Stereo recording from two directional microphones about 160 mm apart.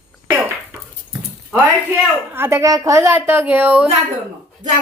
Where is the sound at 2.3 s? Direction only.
15° right (ahead or behind).